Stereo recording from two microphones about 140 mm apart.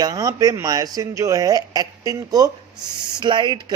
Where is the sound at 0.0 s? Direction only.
25° right (ahead or behind).